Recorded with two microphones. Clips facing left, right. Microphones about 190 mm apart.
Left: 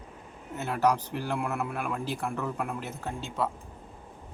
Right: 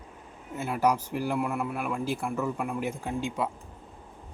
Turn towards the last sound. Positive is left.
turn(degrees=-10)  # may be behind; listen again after turning